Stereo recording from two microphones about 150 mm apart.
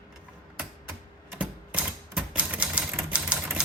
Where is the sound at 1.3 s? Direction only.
10° right (ahead or behind).